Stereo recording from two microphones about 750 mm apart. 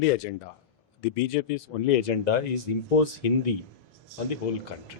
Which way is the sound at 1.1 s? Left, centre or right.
Left.